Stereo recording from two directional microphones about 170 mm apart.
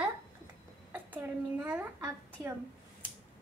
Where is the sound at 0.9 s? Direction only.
10° right (ahead or behind).